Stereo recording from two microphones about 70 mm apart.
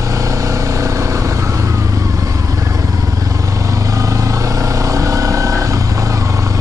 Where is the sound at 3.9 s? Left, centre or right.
Right.